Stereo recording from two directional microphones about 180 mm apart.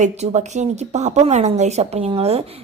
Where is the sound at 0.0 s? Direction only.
40° right (ahead or behind).